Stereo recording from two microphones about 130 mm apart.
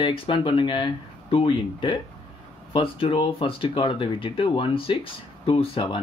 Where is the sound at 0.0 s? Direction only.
40° left (ahead or behind).